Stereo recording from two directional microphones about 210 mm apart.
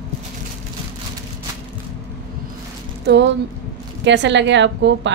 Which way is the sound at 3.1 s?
55° right (ahead or behind).